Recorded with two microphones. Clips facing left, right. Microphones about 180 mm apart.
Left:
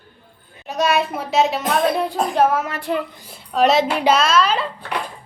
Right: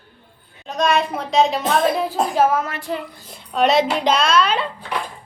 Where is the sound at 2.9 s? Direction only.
65° left (ahead or behind).